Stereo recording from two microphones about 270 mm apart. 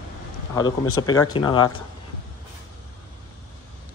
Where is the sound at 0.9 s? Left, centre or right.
Centre.